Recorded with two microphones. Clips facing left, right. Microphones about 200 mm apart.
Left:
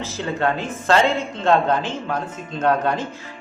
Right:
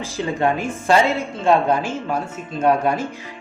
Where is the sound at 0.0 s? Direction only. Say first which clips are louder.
Right 2 dB; 15° right (ahead or behind).